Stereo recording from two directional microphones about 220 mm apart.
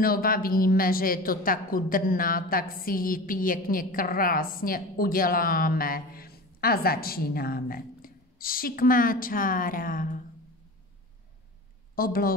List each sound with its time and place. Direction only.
0.0 s a woman's voice: 40° left (ahead or behind)
11.9 s a woman's voice: 40° left (ahead or behind)